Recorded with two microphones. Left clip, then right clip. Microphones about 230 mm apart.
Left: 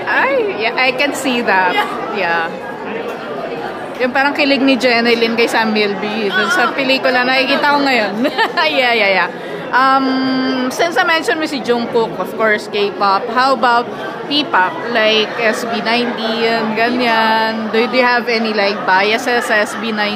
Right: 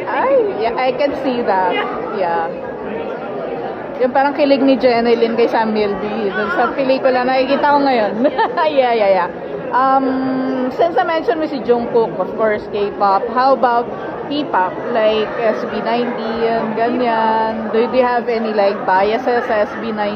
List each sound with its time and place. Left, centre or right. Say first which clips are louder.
0.1 s a woman's voice: even; left
4.0 s a woman's voice: even; left